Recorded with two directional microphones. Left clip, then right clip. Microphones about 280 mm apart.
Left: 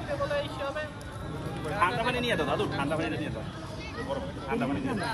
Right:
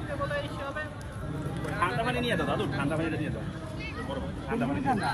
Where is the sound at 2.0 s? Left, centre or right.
Centre.